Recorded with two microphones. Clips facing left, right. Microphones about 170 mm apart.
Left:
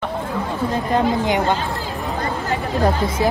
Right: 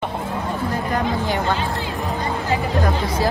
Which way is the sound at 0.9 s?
20° left (ahead or behind).